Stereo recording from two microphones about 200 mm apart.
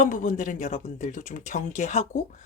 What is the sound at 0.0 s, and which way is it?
Speech, 40° left (ahead or behind).